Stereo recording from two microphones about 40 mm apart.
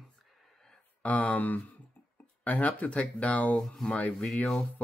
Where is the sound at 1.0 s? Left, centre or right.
Left.